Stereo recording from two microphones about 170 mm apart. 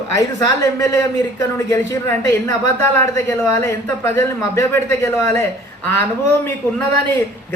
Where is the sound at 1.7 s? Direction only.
20° left (ahead or behind).